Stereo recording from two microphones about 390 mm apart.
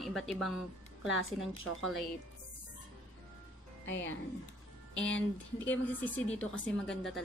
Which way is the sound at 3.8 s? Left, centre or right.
Left.